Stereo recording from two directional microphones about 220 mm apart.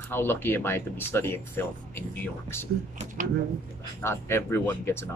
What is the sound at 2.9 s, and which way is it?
Speech, 35° right (ahead or behind).